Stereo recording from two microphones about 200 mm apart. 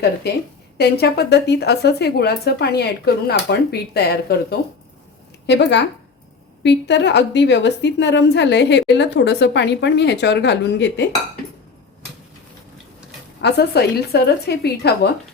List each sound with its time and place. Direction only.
0.2 s a woman's voice: 55° left (ahead or behind)
13.4 s a woman's voice: 55° left (ahead or behind)